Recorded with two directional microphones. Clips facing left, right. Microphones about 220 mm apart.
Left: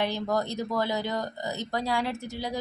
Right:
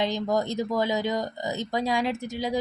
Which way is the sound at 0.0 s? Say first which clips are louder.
Right 2 dB; 15° right (ahead or behind).